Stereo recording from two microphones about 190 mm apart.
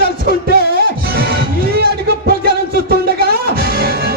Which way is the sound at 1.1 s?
55° right (ahead or behind).